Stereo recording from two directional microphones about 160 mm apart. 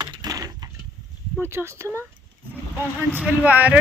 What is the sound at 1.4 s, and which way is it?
Speech, 15° right (ahead or behind).